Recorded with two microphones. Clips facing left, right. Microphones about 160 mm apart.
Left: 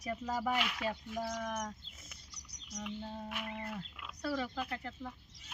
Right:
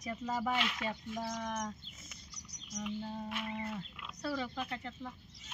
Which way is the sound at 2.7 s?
Centre (ahead or behind).